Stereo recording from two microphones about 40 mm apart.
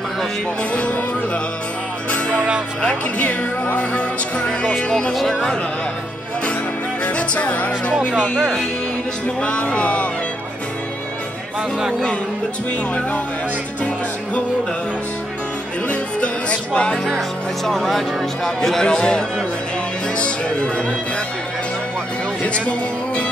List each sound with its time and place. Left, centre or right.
2.8 s music: left
4.5 s speech: centre
5.1 s speech: centre
7.1 s music: left
8.4 s speech: centre
9.4 s music: left
15.9 s music: left
17.6 s speech: centre
20.2 s music: left
22.4 s music: left